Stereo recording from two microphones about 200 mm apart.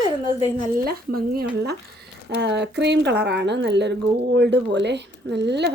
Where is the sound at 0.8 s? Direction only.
50° right (ahead or behind).